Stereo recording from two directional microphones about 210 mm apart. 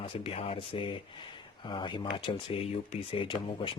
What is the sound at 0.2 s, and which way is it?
Speech, 25° left (ahead or behind).